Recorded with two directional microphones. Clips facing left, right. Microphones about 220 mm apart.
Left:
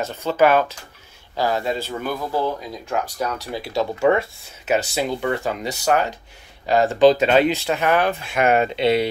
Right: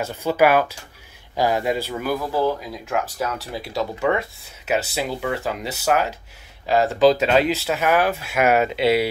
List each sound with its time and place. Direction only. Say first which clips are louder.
0.0 s speech: even; 10° right (ahead or behind)